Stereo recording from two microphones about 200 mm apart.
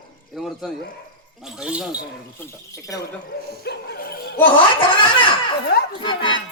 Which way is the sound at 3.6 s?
50° left (ahead or behind).